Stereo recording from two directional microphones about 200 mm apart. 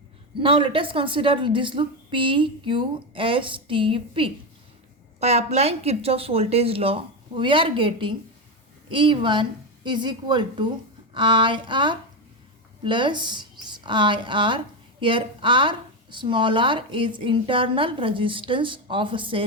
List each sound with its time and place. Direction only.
0.3 s speech: 25° right (ahead or behind)